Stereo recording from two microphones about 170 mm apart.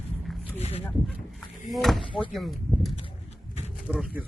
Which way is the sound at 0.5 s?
35° left (ahead or behind).